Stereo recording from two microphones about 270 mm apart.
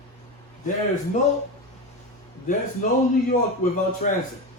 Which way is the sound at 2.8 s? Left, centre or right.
Left.